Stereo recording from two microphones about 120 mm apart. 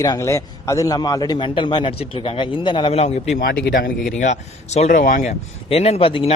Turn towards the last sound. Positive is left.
turn(degrees=50)  # may be behind; listen again after turning